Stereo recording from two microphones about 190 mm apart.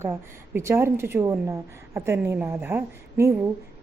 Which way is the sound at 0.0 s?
15° right (ahead or behind).